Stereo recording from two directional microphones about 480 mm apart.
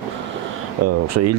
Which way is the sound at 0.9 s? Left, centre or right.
Right.